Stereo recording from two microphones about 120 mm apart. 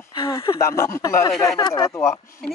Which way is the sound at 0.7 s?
25° left (ahead or behind).